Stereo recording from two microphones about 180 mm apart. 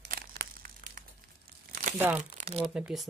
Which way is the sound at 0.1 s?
55° right (ahead or behind).